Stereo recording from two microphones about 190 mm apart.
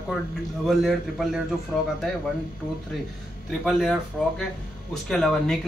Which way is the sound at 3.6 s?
5° left (ahead or behind).